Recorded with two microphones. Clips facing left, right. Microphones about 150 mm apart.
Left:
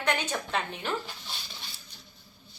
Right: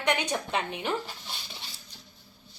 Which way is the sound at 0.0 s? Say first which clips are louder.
Right 2 dB; 15° right (ahead or behind).